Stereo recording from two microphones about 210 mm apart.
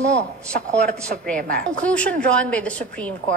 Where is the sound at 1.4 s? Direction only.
45° right (ahead or behind).